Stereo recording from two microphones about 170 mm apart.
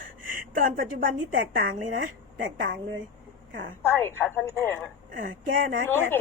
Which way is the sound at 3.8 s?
15° left (ahead or behind).